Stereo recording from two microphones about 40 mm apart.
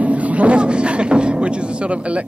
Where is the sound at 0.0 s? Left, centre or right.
Right.